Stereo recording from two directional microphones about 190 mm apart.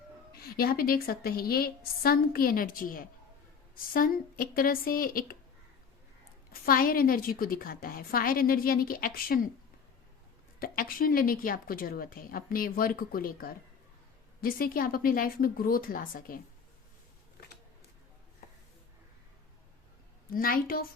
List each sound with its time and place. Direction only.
0.5 s a woman's voice: 50° left (ahead or behind)
6.5 s a woman's voice: 50° left (ahead or behind)
10.6 s a woman's voice: 50° left (ahead or behind)
20.3 s a woman's voice: 50° left (ahead or behind)